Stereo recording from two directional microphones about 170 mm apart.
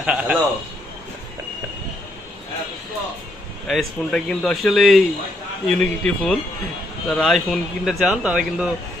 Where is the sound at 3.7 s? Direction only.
Centre (ahead or behind).